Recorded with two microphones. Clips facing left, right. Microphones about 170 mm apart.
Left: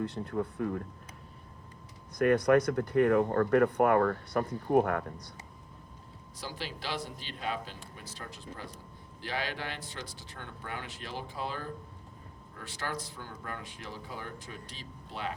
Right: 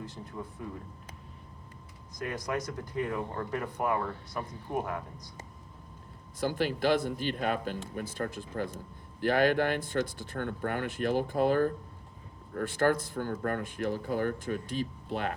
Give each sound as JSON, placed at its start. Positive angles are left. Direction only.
{"t": 0.0, "sound": "speech", "side_deg": 60}
{"t": 2.1, "sound": "speech", "side_deg": 60}
{"t": 6.4, "sound": "speech", "side_deg": -55}